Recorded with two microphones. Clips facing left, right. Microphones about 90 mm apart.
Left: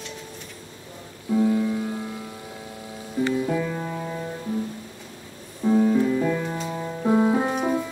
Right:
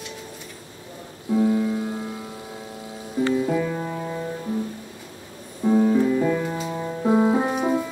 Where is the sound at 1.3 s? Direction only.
20° right (ahead or behind).